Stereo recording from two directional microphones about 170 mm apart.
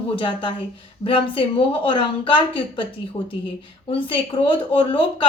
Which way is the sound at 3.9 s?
30° left (ahead or behind).